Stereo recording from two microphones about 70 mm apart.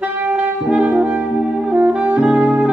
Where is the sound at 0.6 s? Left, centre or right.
Centre.